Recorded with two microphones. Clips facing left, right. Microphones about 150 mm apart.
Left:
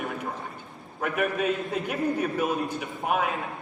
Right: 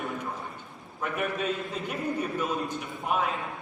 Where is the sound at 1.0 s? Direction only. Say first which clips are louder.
Left 4 dB; 60° left (ahead or behind).